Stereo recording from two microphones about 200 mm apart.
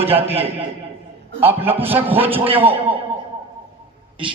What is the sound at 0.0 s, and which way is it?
Speech, 30° right (ahead or behind).